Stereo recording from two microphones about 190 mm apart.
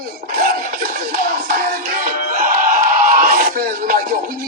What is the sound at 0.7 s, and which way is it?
Music, 50° right (ahead or behind).